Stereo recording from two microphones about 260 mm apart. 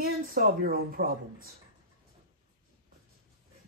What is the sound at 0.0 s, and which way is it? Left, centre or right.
A woman's voice, right.